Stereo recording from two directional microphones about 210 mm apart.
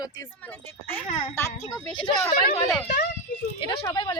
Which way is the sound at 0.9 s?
10° left (ahead or behind).